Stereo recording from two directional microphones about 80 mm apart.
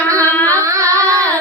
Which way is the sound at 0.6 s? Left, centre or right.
Right.